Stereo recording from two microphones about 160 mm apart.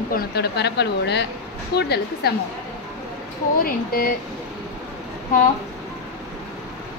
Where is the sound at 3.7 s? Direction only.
65° left (ahead or behind).